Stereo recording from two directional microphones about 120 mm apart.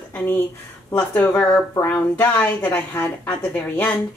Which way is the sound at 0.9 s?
15° left (ahead or behind).